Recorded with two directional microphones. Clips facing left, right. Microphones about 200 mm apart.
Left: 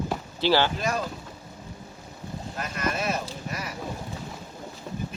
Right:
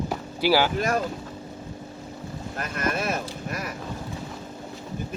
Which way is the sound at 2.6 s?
50° right (ahead or behind).